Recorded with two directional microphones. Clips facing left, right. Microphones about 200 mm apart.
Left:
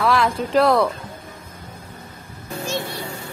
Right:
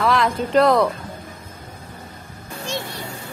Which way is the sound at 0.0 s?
Centre (ahead or behind).